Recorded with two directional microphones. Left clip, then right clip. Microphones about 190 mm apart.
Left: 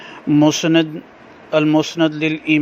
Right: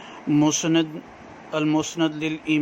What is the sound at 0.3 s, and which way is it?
Speech, 25° left (ahead or behind).